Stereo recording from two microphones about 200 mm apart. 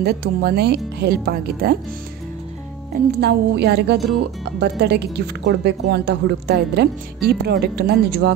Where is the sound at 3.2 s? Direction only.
55° right (ahead or behind).